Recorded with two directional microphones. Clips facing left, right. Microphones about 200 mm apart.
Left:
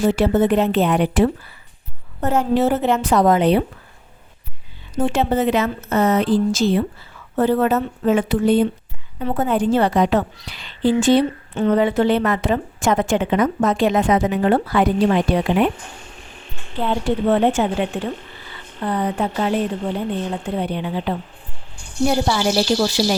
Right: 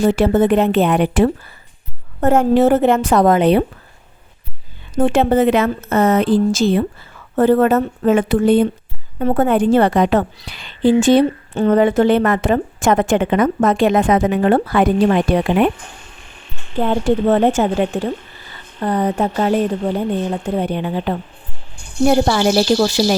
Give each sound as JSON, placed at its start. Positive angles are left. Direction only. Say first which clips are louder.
{"t": 0.1, "sound": "a woman's voice", "louder": "right 3 dB", "side_deg": -50}
{"t": 4.9, "sound": "a woman's voice", "louder": "right 5 dB", "side_deg": -55}
{"t": 16.7, "sound": "a woman's voice", "louder": "right 4 dB", "side_deg": -45}